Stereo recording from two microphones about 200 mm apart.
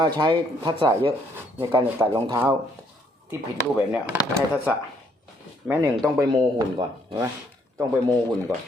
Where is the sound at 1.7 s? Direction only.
20° right (ahead or behind).